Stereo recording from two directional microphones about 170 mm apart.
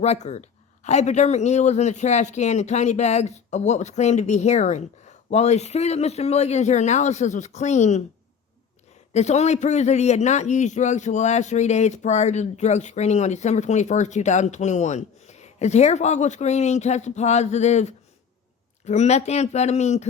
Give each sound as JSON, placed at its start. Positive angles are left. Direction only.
{"t": 0.0, "sound": "speech", "side_deg": 40}
{"t": 9.1, "sound": "a man's voice", "side_deg": 40}